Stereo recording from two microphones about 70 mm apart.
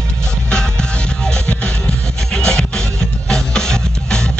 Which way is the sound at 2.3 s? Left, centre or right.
Centre.